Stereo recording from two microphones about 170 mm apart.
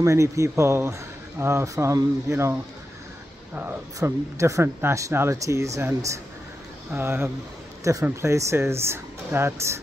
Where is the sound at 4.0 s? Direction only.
20° right (ahead or behind).